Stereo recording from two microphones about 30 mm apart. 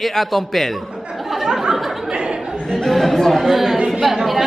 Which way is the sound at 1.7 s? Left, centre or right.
Centre.